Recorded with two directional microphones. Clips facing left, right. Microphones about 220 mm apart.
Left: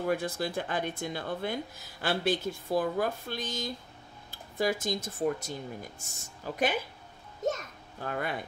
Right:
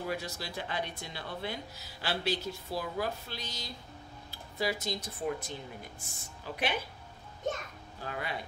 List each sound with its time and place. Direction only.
0.0 s a child's voice: 50° left (ahead or behind)